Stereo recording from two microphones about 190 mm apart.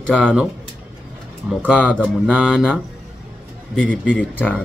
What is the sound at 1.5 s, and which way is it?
A man's voice, 5° right (ahead or behind).